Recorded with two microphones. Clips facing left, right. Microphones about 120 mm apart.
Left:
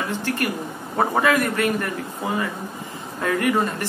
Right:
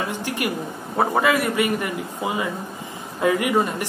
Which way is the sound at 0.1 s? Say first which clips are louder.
Left 1 dB; 15° right (ahead or behind).